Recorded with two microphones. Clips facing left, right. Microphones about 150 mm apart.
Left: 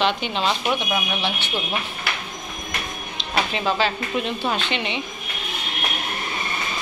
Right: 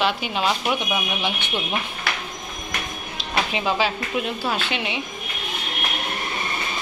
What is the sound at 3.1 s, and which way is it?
Speech, 10° right (ahead or behind).